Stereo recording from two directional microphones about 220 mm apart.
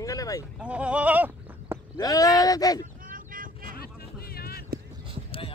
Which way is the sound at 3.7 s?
45° left (ahead or behind).